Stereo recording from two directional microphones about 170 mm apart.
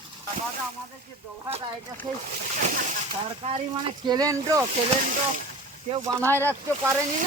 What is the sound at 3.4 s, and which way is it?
Speech, 40° right (ahead or behind).